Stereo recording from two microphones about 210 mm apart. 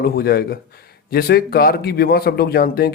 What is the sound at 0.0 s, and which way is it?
Speech, 45° left (ahead or behind).